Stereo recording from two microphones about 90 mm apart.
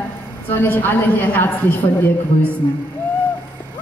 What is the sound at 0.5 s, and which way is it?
A woman's voice, 25° left (ahead or behind).